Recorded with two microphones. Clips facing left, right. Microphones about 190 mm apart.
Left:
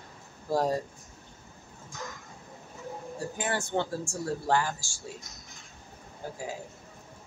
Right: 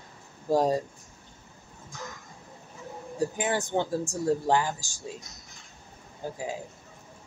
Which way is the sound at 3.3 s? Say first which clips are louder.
Even; 15° right (ahead or behind).